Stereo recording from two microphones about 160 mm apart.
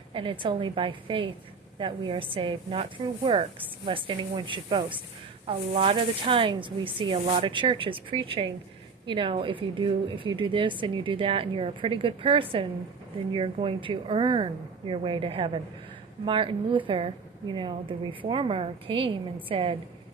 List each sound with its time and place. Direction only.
0.1 s a woman's voice: 30° right (ahead or behind)